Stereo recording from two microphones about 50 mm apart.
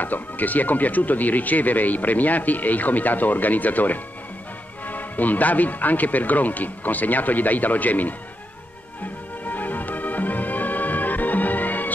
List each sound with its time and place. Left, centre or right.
0.0 s speech: left
9.4 s music: left